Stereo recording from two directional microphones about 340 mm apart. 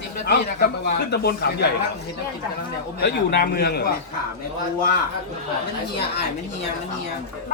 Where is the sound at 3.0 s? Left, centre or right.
Left.